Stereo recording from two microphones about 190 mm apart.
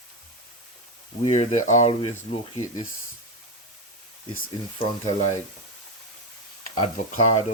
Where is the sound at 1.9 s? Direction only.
25° left (ahead or behind).